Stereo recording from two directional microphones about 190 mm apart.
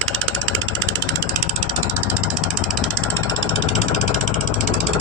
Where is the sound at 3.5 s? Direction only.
35° left (ahead or behind).